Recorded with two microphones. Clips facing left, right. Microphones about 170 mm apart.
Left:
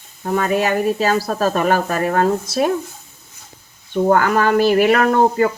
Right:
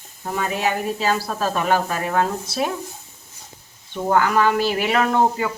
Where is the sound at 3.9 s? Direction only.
50° left (ahead or behind).